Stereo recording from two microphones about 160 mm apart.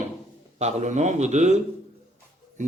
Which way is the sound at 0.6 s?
45° right (ahead or behind).